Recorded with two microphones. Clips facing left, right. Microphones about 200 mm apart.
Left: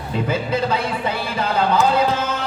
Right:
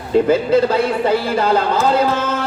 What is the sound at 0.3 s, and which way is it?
Speech, 55° right (ahead or behind).